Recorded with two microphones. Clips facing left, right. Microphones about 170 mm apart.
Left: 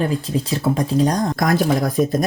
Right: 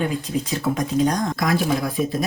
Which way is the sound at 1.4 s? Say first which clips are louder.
Left 3 dB; 45° left (ahead or behind).